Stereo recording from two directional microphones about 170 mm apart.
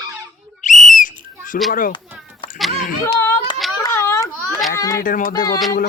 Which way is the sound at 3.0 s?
15° left (ahead or behind).